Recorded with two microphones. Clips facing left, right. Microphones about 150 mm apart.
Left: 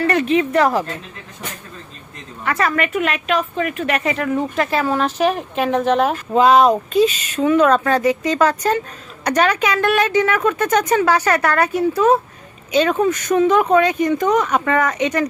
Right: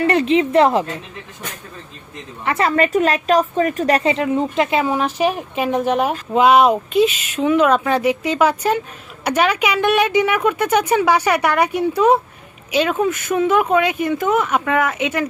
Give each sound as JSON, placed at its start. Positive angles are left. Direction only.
{"t": 0.0, "sound": "speech", "side_deg": -25}
{"t": 2.4, "sound": "a woman's voice", "side_deg": -25}